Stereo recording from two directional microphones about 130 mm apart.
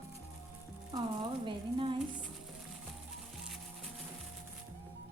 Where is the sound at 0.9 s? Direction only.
40° right (ahead or behind).